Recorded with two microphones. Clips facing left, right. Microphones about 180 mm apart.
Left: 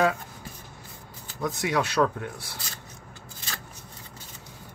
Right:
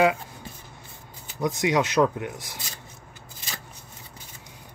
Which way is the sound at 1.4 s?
20° right (ahead or behind).